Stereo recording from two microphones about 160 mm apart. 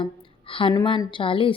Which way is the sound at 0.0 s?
35° left (ahead or behind).